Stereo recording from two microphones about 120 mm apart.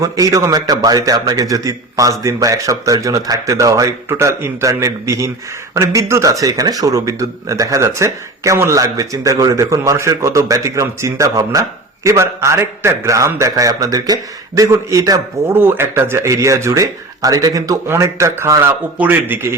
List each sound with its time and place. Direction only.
0.0 s speech: 25° right (ahead or behind)
15.5 s a man's voice: 15° right (ahead or behind)